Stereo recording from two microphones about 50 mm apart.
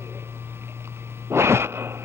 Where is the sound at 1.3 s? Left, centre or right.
Right.